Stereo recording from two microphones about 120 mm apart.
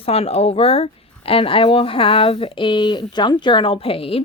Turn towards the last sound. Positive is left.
turn(degrees=50)  # may be behind; listen again after turning